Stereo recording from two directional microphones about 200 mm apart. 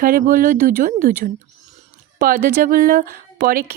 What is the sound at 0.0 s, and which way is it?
A woman's voice, 45° right (ahead or behind).